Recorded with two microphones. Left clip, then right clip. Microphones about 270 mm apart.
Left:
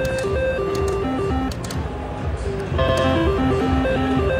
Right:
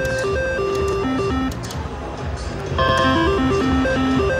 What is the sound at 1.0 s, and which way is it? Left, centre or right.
Music, centre.